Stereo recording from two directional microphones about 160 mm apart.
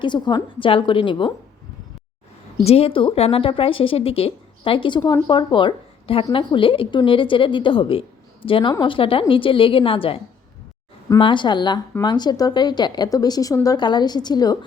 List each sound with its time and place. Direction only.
0.0 s a woman's voice: 30° left (ahead or behind)
2.6 s a woman's voice: 40° left (ahead or behind)
11.2 s speech: 30° left (ahead or behind)